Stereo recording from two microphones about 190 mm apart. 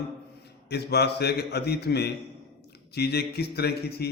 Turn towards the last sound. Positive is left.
turn(degrees=55)  # may be behind; listen again after turning